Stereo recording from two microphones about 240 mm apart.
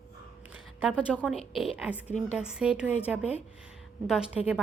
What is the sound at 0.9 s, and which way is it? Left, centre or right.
A woman's voice, centre.